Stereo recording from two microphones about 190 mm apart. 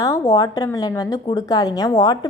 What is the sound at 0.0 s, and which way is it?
A woman's voice, 15° left (ahead or behind).